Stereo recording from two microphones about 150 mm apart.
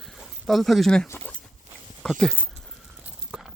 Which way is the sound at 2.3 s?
10° right (ahead or behind).